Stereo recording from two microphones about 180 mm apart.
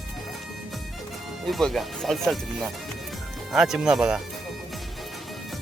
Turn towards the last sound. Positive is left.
turn(degrees=-5)  # may be behind; listen again after turning